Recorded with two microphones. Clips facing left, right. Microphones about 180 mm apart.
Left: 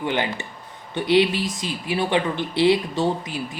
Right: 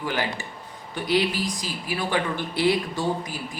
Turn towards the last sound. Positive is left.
turn(degrees=20)  # may be behind; listen again after turning